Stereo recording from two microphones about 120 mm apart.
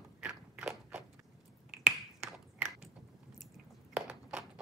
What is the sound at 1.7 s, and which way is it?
Finger snapping, 15° right (ahead or behind).